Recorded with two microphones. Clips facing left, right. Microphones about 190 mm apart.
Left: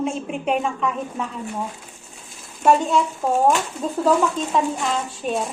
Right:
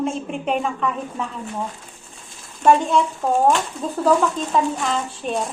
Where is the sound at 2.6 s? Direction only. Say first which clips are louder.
Right 1 dB; centre (ahead or behind).